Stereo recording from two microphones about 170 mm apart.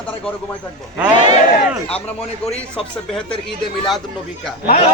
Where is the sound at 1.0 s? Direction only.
25° right (ahead or behind).